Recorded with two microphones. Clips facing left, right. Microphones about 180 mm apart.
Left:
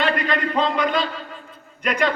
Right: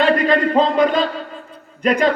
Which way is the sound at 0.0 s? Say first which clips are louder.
Right 7 dB; 35° right (ahead or behind).